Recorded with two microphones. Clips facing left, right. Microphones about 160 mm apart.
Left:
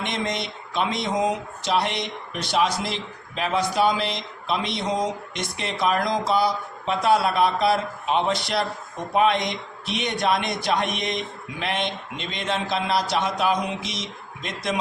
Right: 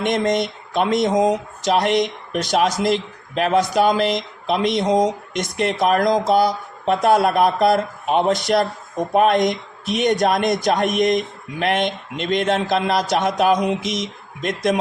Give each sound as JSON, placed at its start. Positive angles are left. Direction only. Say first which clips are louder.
{"t": 0.0, "sound": "speech", "louder": "right 9 dB", "side_deg": -50}